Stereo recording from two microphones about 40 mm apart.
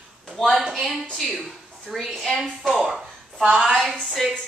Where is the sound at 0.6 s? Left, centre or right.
Centre.